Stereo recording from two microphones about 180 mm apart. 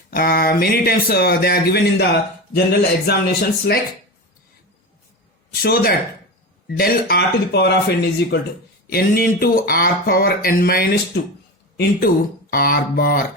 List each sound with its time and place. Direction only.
0.1 s speech: 55° left (ahead or behind)
3.1 s speech: 60° left (ahead or behind)
5.6 s speech: 55° left (ahead or behind)
8.9 s speech: 55° left (ahead or behind)